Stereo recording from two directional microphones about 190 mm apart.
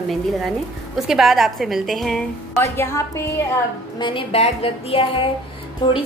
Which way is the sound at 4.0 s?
25° left (ahead or behind).